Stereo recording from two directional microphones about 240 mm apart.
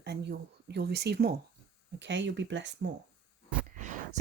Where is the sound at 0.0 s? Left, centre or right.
Right.